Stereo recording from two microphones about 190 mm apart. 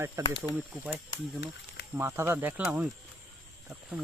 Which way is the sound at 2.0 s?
15° right (ahead or behind).